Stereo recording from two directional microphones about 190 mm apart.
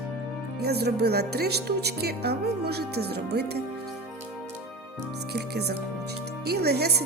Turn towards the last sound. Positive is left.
turn(degrees=-55)  # may be behind; listen again after turning